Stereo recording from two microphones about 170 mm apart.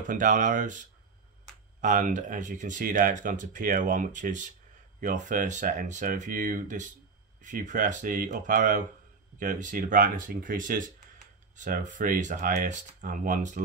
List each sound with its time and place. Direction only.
0.1 s speech: 50° right (ahead or behind)